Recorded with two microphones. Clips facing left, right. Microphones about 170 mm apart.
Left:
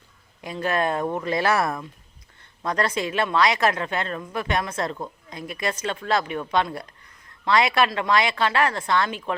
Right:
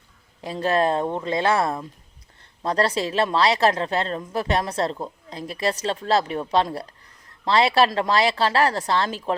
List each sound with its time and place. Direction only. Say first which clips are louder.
0.4 s a woman's voice: right 3 dB; 30° right (ahead or behind)